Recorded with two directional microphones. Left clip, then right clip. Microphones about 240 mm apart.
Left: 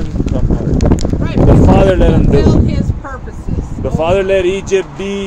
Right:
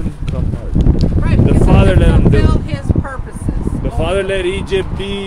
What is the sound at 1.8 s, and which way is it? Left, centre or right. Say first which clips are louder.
Speech: left 3 dB; centre.